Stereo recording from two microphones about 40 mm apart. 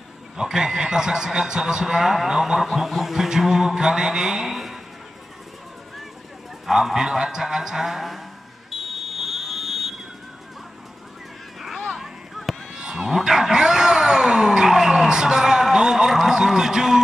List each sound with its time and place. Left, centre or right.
0.4 s a man's voice: centre
6.6 s a man's voice: centre
8.7 s fire alarm: centre
11.6 s a sound: centre
12.7 s speech: centre
13.6 s a sound: centre
16.4 s a man's voice: centre